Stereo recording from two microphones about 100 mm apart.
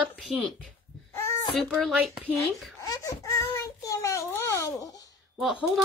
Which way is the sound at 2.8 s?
35° left (ahead or behind).